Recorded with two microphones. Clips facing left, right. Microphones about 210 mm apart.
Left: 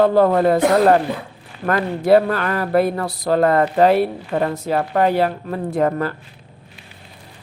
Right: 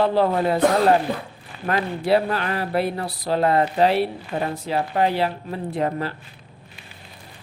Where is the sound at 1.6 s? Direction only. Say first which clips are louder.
Left 4 dB; 50° left (ahead or behind).